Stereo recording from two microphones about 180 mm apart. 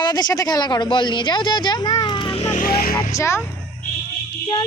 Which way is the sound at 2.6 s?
55° left (ahead or behind).